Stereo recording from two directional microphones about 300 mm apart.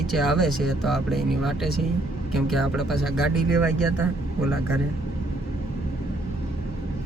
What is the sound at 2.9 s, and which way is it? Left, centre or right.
Speech, left.